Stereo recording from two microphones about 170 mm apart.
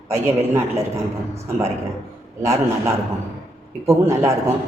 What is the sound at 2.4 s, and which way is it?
A man's voice, 15° right (ahead or behind).